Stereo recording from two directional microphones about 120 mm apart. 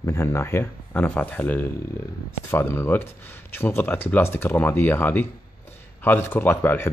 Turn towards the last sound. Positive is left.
turn(degrees=20)  # may be behind; listen again after turning